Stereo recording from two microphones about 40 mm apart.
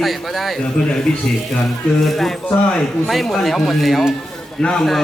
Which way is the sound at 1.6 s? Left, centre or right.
Centre.